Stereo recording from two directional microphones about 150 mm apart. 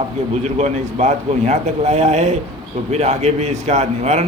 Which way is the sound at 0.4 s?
50° right (ahead or behind).